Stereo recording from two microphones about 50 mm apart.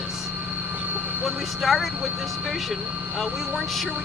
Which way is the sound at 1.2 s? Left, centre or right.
Centre.